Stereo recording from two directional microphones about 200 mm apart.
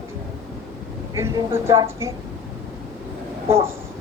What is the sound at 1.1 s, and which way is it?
A woman's voice, 15° right (ahead or behind).